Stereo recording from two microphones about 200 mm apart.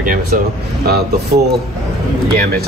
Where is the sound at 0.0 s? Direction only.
45° right (ahead or behind).